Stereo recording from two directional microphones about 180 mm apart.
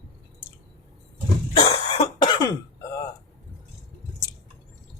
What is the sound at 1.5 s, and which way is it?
Cough, 30° left (ahead or behind).